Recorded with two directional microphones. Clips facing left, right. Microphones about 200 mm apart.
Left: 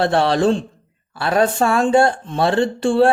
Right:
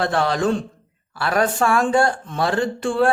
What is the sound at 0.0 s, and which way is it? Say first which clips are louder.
Speech: left 4 dB; 30° left (ahead or behind).